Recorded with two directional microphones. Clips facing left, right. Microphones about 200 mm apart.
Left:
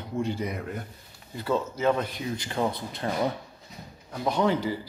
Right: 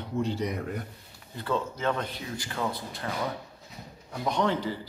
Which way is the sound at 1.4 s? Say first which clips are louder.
Left 4 dB; 10° left (ahead or behind).